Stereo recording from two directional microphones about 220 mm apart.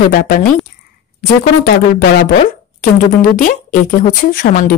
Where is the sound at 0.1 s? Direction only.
40° left (ahead or behind).